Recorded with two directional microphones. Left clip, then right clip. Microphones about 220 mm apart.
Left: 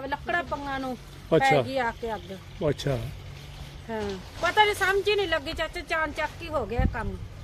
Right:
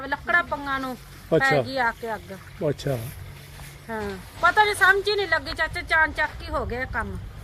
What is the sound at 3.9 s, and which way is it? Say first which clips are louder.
Speech: right 1 dB; 15° left (ahead or behind).